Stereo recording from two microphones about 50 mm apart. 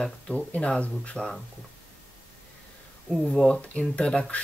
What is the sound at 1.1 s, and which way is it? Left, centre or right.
Speech, centre.